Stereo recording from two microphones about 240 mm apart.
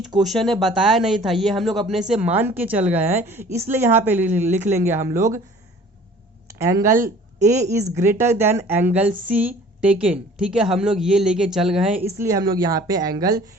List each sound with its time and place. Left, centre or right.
0.2 s a woman's voice: centre
6.5 s a woman's voice: centre
12.2 s a woman's voice: centre